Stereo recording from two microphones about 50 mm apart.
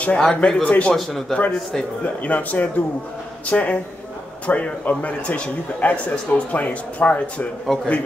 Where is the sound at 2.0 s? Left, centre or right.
Left.